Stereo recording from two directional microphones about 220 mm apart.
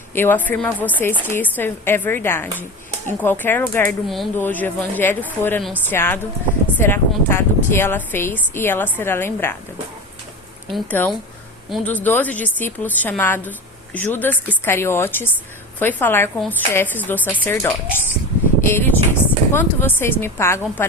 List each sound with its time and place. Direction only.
0.1 s a woman's voice: 10° left (ahead or behind)
10.7 s a woman's voice: 5° left (ahead or behind)